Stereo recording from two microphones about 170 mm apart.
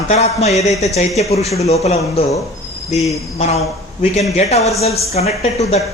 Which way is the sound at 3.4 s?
40° left (ahead or behind).